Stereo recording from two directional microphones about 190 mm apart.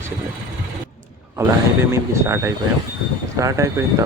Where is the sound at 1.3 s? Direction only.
15° right (ahead or behind).